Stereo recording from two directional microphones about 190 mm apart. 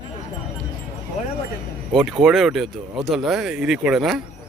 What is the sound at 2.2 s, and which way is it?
Speech, 5° right (ahead or behind).